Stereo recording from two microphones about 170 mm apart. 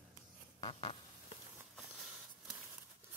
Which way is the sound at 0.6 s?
30° left (ahead or behind).